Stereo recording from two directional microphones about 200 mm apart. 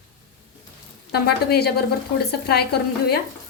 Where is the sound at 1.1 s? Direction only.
55° left (ahead or behind).